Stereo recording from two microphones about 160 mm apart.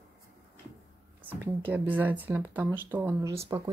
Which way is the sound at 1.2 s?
10° right (ahead or behind).